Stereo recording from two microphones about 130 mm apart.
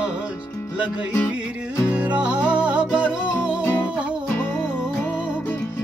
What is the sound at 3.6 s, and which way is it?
Music, 15° left (ahead or behind).